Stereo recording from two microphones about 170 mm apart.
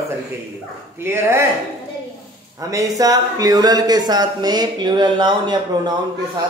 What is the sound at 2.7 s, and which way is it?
Speech, 20° right (ahead or behind).